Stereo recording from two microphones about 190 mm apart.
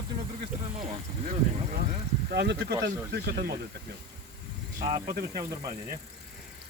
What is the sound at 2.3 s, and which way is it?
Speech, 60° right (ahead or behind).